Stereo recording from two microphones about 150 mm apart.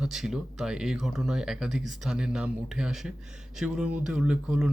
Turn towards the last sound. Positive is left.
turn(degrees=-5)  # may be behind; listen again after turning